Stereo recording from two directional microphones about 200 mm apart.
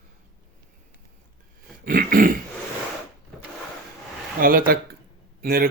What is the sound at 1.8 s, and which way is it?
Speech, 45° right (ahead or behind).